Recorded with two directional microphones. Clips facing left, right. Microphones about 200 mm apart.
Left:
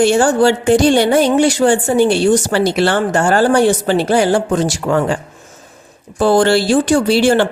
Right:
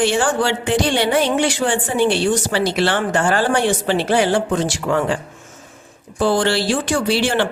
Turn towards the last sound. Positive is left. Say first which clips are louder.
# left 6 dB
turn(degrees=45)  # may be behind; listen again after turning